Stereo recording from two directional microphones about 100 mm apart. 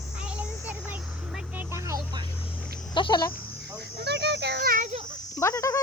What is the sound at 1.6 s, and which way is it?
Music, 25° right (ahead or behind).